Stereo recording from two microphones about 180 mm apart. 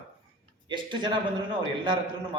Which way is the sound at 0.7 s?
25° right (ahead or behind).